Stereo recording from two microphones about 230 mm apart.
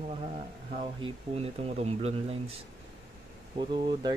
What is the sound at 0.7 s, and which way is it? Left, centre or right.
Speech, right.